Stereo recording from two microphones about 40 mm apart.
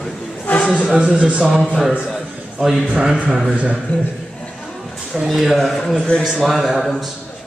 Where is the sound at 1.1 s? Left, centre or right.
Right.